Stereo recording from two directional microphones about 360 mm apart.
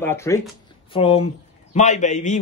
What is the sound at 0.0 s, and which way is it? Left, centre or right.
Speech, centre.